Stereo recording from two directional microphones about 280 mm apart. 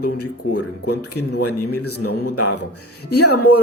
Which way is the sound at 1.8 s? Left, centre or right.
Left.